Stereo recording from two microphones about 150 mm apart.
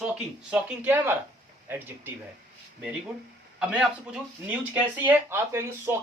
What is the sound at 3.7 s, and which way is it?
Speech, 5° right (ahead or behind).